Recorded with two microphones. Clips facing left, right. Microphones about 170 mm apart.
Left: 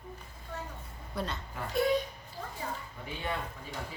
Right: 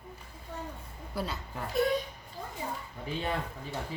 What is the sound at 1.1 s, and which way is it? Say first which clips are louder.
Speech: right 1 dB; 5° right (ahead or behind).